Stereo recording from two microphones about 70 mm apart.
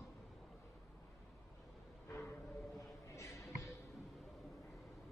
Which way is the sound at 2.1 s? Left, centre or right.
Left.